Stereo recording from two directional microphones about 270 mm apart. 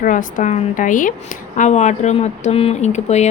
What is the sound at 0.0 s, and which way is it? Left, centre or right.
Speech, left.